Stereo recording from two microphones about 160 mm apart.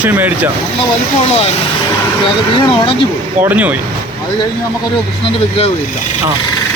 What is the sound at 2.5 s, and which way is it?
Speech, 35° left (ahead or behind).